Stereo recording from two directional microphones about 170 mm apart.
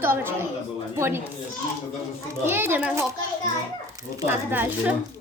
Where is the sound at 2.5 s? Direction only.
15° right (ahead or behind).